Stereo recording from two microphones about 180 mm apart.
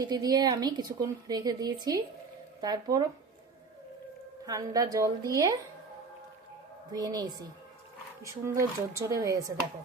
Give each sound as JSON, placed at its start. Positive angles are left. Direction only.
{"t": 0.0, "sound": "a woman's voice", "side_deg": -20}
{"t": 4.4, "sound": "a woman's voice", "side_deg": -20}
{"t": 6.9, "sound": "a woman's voice", "side_deg": -20}